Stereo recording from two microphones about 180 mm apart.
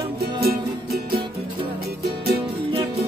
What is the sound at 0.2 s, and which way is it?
Music, 60° right (ahead or behind).